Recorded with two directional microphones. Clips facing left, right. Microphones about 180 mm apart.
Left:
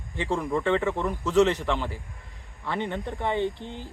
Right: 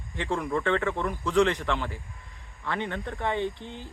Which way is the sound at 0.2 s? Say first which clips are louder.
Left 2 dB; 5° left (ahead or behind).